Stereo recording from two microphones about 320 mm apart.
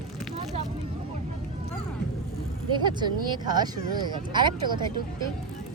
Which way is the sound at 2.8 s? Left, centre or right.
Centre.